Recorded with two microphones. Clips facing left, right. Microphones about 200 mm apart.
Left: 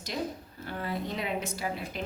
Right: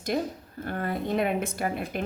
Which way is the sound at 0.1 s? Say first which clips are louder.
Right 3 dB; 55° right (ahead or behind).